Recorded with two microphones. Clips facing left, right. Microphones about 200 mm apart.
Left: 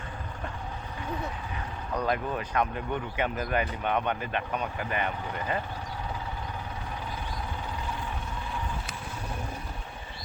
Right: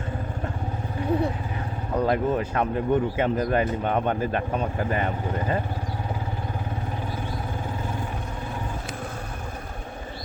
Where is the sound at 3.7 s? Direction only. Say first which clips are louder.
Right 5 dB; 40° right (ahead or behind).